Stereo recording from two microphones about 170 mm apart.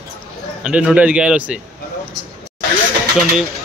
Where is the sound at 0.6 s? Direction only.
5° right (ahead or behind).